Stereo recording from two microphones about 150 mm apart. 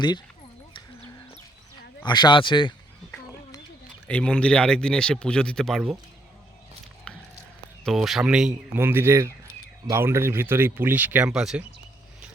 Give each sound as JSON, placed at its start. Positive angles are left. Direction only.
{"t": 2.0, "sound": "speech", "side_deg": 30}
{"t": 4.0, "sound": "speech", "side_deg": 5}
{"t": 7.1, "sound": "a sound", "side_deg": 5}
{"t": 7.9, "sound": "speech", "side_deg": 0}